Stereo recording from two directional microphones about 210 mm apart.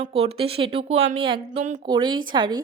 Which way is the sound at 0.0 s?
30° right (ahead or behind).